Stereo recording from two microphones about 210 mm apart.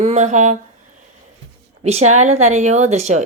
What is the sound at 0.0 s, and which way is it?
Speech, 35° right (ahead or behind).